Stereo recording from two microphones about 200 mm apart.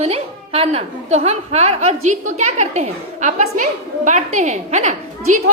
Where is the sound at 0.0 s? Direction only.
30° right (ahead or behind).